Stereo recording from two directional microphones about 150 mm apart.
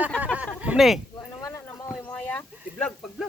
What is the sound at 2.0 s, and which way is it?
Speech, 10° left (ahead or behind).